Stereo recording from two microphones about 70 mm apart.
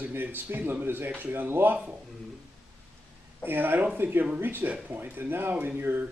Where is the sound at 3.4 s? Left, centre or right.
Right.